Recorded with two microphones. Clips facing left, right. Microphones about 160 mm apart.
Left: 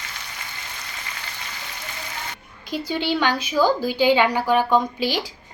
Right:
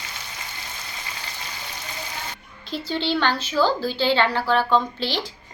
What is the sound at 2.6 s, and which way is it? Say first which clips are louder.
A woman's voice: left 1 dB; 10° left (ahead or behind).